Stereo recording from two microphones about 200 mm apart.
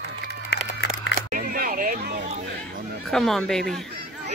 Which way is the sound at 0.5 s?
60° left (ahead or behind).